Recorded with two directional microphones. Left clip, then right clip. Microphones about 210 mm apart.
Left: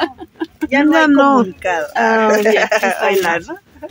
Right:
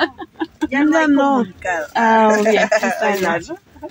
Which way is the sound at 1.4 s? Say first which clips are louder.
Left 4 dB; 40° left (ahead or behind).